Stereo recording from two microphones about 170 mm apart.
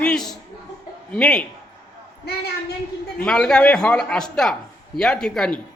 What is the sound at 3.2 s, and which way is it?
A man's voice, 5° left (ahead or behind).